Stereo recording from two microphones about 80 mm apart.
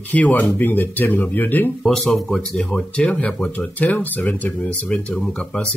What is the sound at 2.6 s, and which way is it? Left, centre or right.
Speech, centre.